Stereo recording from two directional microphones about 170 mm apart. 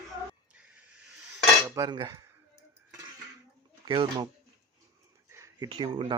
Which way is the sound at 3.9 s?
30° right (ahead or behind).